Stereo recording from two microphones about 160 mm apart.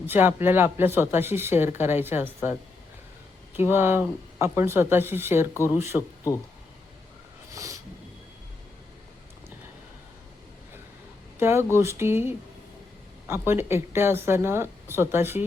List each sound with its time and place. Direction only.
0.0 s speech: 15° right (ahead or behind)
3.5 s speech: 15° right (ahead or behind)
7.5 s a sound: 20° right (ahead or behind)
11.3 s speech: 15° right (ahead or behind)